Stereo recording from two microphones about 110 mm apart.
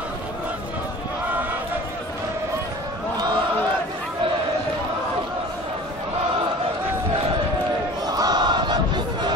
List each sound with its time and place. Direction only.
8.1 s crowd: 35° right (ahead or behind)